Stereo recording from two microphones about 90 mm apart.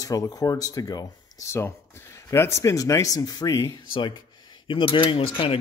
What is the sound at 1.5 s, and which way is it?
Speech, 30° left (ahead or behind).